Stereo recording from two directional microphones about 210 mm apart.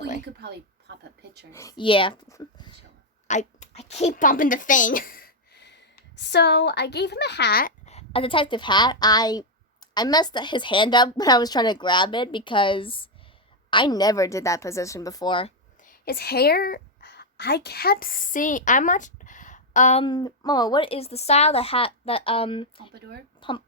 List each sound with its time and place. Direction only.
0.3 s a sound: 50° right (ahead or behind)
1.5 s speech: 20° left (ahead or behind)
3.2 s a sound: 35° left (ahead or behind)
6.1 s speech: 55° left (ahead or behind)
7.9 s a woman's voice: 30° left (ahead or behind)
15.8 s a woman's voice: 45° left (ahead or behind)
20.1 s speech: 20° left (ahead or behind)
23.0 s speech: 50° right (ahead or behind)
23.4 s speech: 25° left (ahead or behind)